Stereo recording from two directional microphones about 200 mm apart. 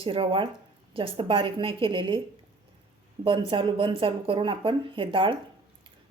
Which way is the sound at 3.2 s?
25° right (ahead or behind).